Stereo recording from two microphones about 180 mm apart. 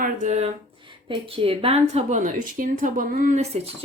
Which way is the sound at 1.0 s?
25° right (ahead or behind).